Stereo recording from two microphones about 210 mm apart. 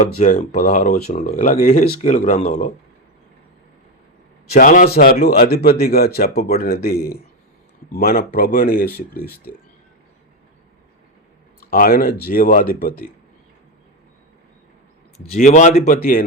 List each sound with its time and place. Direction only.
0.0 s speech: 35° left (ahead or behind)
4.5 s speech: 40° left (ahead or behind)
6.4 s speech: 30° left (ahead or behind)
6.7 s speech: 45° left (ahead or behind)
11.7 s speech: 45° left (ahead or behind)
15.3 s speech: 35° left (ahead or behind)